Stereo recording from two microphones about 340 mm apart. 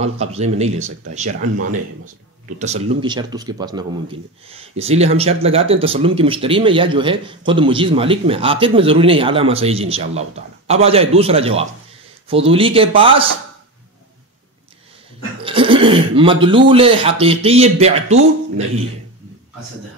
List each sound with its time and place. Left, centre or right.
0.0 s speech: centre
2.6 s a man's voice: centre
15.4 s a man's voice: centre